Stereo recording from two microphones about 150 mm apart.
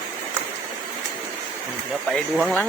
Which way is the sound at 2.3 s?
Centre (ahead or behind).